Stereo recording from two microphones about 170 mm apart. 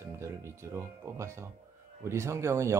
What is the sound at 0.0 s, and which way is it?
Speech, 15° right (ahead or behind).